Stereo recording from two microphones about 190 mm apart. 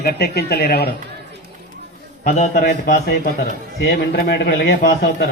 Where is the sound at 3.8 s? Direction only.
55° left (ahead or behind).